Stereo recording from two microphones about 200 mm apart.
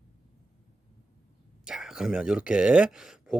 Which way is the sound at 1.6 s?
5° right (ahead or behind).